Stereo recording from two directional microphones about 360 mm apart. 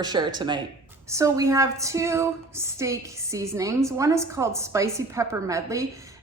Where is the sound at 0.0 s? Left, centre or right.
Centre.